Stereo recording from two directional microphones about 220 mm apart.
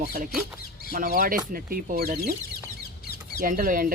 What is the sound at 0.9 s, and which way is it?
Speech, 40° right (ahead or behind).